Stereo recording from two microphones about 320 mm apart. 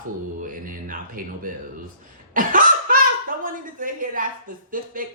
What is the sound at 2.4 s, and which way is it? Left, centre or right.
Laughter, right.